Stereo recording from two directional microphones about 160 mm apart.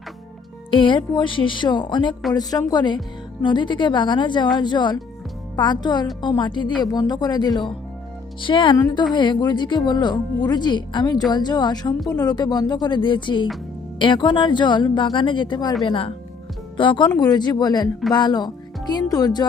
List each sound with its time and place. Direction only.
0.7 s speech: 30° left (ahead or behind)